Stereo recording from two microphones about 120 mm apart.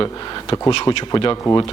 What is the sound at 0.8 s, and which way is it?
Speech, 35° left (ahead or behind).